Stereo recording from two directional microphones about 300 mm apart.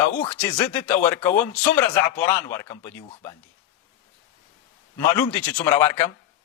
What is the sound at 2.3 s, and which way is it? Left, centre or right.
Speech, centre.